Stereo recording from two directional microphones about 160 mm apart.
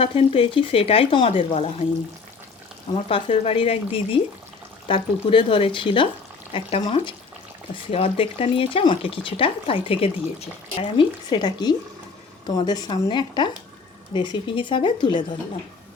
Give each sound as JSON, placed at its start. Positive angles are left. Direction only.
{"t": 0.0, "sound": "speech", "side_deg": 35}
{"t": 3.1, "sound": "speech", "side_deg": 35}
{"t": 11.3, "sound": "speech", "side_deg": 30}